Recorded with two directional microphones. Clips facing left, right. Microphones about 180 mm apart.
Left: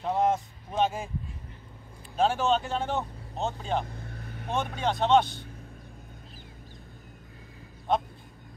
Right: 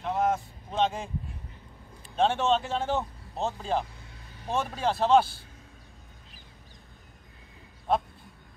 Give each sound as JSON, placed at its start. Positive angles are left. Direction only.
{"t": 0.0, "sound": "vehicle", "side_deg": 30}
{"t": 0.3, "sound": "vehicle", "side_deg": 10}
{"t": 2.1, "sound": "speech", "side_deg": 0}
{"t": 3.8, "sound": "vehicle", "side_deg": 55}
{"t": 4.6, "sound": "speech", "side_deg": 0}